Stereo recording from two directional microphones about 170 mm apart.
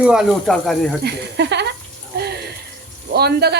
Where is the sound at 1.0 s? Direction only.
85° right.